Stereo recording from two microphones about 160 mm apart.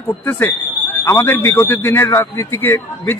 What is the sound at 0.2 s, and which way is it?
Speech, 15° left (ahead or behind).